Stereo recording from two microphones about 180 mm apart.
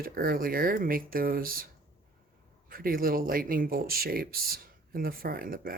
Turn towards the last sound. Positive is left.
turn(degrees=-55)  # may be behind; listen again after turning